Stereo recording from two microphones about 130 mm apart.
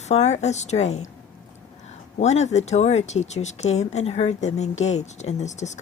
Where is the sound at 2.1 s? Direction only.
60° left (ahead or behind).